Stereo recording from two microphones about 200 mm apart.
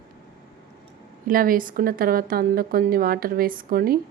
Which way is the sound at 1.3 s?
45° right (ahead or behind).